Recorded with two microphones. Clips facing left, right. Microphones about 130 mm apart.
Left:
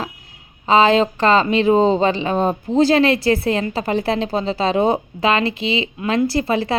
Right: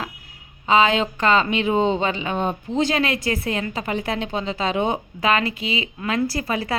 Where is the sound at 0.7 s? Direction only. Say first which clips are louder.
Left 4 dB; 35° left (ahead or behind).